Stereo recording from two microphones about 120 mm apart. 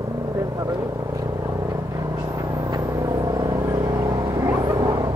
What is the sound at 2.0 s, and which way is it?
Vehicle, 25° right (ahead or behind).